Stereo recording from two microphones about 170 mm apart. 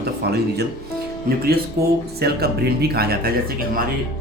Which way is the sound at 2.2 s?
65° right (ahead or behind).